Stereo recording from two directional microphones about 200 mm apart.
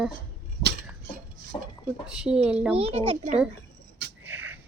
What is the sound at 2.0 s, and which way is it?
Speech, 5° right (ahead or behind).